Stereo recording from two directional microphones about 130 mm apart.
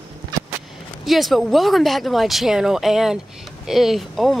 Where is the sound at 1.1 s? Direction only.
Centre (ahead or behind).